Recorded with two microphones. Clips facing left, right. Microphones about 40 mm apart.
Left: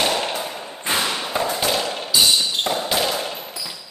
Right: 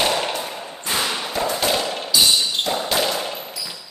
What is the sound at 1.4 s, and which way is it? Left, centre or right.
Thump, centre.